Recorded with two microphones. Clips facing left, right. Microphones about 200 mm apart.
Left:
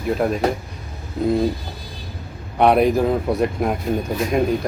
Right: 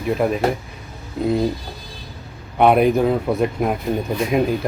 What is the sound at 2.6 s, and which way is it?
Speech, centre (ahead or behind).